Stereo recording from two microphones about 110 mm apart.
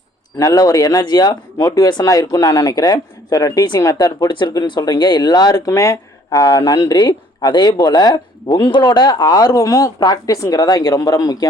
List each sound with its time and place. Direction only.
0.3 s speech: 30° left (ahead or behind)
5.5 s speech: 25° left (ahead or behind)